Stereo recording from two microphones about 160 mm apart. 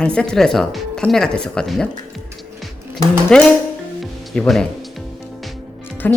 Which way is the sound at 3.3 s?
5° left (ahead or behind).